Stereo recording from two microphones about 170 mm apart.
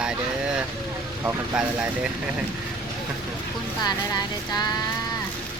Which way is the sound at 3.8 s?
25° left (ahead or behind).